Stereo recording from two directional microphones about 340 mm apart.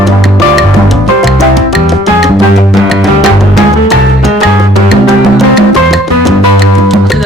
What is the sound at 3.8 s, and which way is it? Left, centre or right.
Music, centre.